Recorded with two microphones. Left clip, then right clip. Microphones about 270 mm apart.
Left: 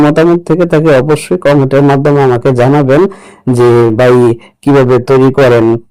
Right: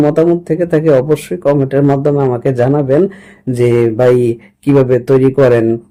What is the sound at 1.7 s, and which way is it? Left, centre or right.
Speech, left.